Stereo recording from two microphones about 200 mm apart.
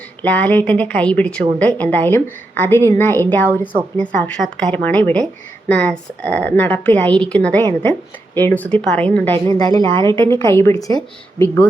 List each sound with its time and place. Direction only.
0.2 s a woman's voice: 10° left (ahead or behind)
9.5 s a woman's voice: 20° left (ahead or behind)